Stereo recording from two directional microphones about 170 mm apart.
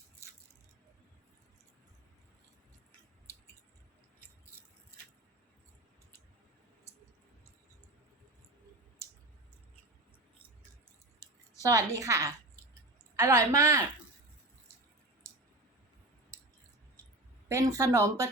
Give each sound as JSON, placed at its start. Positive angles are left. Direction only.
{"t": 11.2, "sound": "a sound", "side_deg": -20}
{"t": 13.1, "sound": "speech", "side_deg": -20}
{"t": 17.5, "sound": "speech", "side_deg": -20}